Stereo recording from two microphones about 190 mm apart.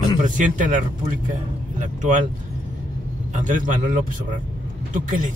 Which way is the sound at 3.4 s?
40° right (ahead or behind).